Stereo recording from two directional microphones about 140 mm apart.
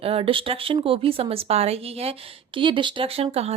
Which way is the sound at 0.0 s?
40° right (ahead or behind).